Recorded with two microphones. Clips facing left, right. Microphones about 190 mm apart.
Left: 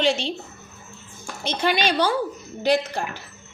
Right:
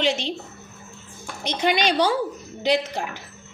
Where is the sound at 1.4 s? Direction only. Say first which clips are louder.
Right 1 dB; 15° right (ahead or behind).